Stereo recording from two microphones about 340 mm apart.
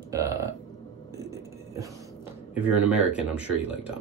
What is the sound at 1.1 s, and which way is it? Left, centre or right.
Hum, centre.